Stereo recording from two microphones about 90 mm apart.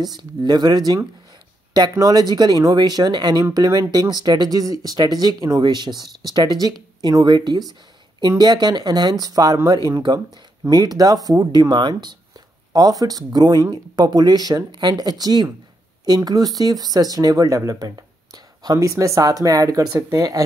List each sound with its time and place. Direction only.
0.0 s speech: 55° right (ahead or behind)
5.6 s speech: 55° right (ahead or behind)
10.7 s speech: 45° right (ahead or behind)